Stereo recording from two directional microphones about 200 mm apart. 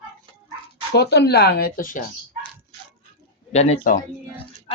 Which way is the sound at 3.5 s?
35° left (ahead or behind).